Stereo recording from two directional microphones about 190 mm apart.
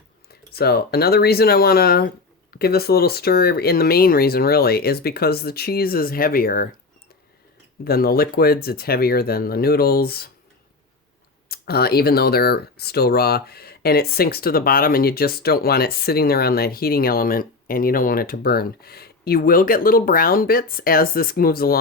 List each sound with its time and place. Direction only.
0.5 s speech: 55° left (ahead or behind)
7.9 s speech: 50° left (ahead or behind)
11.4 s speech: 55° left (ahead or behind)